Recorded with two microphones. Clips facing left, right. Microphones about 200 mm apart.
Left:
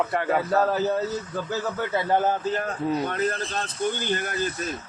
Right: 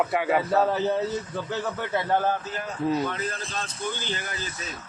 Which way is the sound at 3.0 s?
55° left (ahead or behind).